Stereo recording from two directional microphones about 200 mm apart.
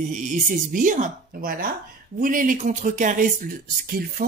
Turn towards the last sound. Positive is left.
turn(degrees=-45)  # may be behind; listen again after turning